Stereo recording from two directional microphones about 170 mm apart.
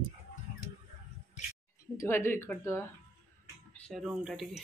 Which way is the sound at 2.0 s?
15° left (ahead or behind).